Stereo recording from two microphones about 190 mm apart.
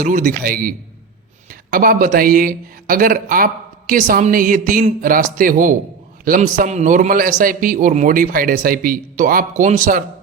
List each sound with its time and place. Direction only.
0.0 s speech: 40° right (ahead or behind)